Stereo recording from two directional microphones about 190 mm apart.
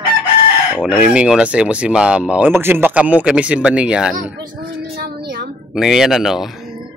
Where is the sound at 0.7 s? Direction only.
5° right (ahead or behind).